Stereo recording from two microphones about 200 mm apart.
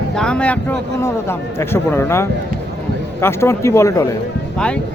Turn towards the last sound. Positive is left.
turn(degrees=5)  # may be behind; listen again after turning